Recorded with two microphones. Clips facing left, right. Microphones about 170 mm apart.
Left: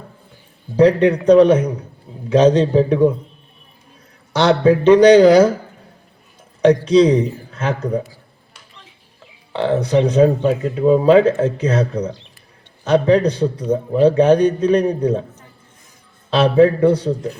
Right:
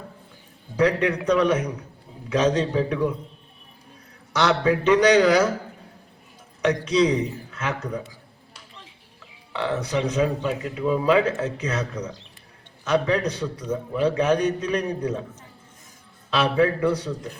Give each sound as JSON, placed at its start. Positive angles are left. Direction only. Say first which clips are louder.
{"t": 0.8, "sound": "speech", "louder": "left 8 dB", "side_deg": 30}
{"t": 4.3, "sound": "speech", "louder": "left 7 dB", "side_deg": 30}
{"t": 6.6, "sound": "speech", "louder": "left 9 dB", "side_deg": 30}
{"t": 9.5, "sound": "speech", "louder": "left 8 dB", "side_deg": 30}